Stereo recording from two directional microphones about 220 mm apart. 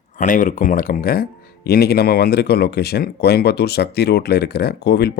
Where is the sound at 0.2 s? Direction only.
40° left (ahead or behind).